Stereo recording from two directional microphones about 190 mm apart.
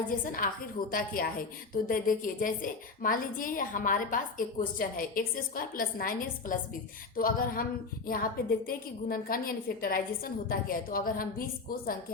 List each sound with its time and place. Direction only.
0.3 s a woman's voice: 50° left (ahead or behind)